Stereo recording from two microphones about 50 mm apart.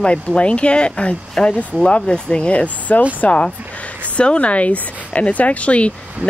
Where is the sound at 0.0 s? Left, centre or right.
Left.